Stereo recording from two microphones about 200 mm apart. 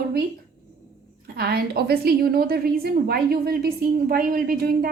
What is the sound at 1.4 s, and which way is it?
A woman's voice, 50° right (ahead or behind).